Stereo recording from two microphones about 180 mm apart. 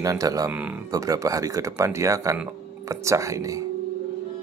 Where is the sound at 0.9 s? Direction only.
20° right (ahead or behind).